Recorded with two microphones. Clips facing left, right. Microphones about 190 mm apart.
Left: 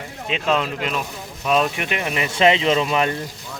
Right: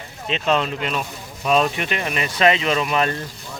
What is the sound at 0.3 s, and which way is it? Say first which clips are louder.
Speech: right 1 dB; 5° left (ahead or behind).